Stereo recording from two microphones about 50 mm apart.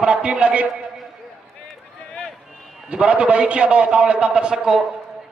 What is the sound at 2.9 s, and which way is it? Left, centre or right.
A man's voice, right.